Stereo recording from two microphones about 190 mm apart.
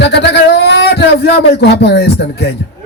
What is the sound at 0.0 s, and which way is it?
A man's voice, 65° left (ahead or behind).